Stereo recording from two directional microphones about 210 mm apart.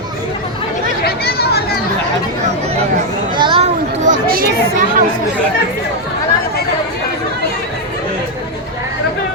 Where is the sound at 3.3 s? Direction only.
25° right (ahead or behind); by 4.4 s 40° right (ahead or behind).